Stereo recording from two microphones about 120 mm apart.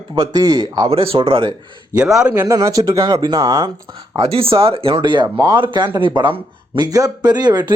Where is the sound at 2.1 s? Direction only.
10° right (ahead or behind).